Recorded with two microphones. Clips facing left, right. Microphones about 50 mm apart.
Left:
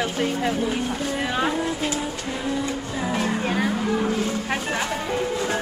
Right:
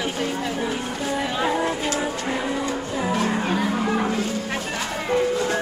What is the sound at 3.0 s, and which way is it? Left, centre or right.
Music, centre.